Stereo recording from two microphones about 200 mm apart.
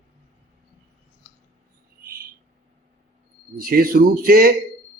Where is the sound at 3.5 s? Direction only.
45° right (ahead or behind).